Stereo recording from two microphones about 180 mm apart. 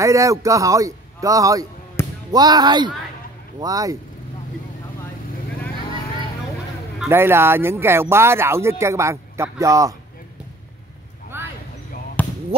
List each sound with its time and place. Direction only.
0.0 s speech: 15° right (ahead or behind)
2.0 s basketball bounce: 15° left (ahead or behind)
2.3 s speech: 20° right (ahead or behind)
7.0 s speech: 15° right (ahead or behind)
11.3 s a sound: 10° right (ahead or behind)
12.2 s basketball bounce: 10° left (ahead or behind)